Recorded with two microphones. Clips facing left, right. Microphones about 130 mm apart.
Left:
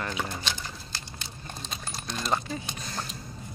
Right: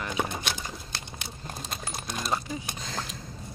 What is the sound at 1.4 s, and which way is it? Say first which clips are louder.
Coin: right 2 dB; 10° right (ahead or behind).